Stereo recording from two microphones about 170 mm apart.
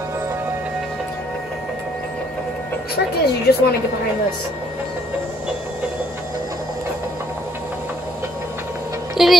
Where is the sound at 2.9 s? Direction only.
70° left (ahead or behind).